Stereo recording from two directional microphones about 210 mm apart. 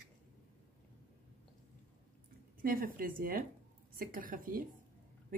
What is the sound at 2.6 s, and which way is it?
A woman's voice, 45° right (ahead or behind).